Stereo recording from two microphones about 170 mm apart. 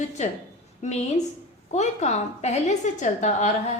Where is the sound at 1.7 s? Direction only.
40° left (ahead or behind).